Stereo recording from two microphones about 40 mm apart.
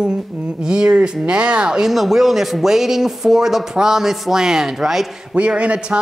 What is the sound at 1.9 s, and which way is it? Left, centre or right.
Speech, centre.